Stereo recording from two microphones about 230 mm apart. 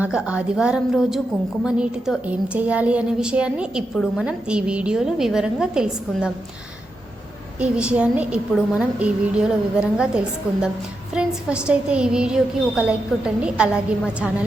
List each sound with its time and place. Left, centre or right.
0.0 s speech: centre
7.6 s speech: centre